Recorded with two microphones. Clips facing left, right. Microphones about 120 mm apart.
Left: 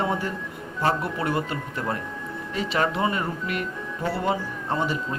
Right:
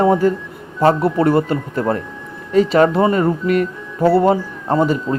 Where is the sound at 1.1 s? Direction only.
35° right (ahead or behind).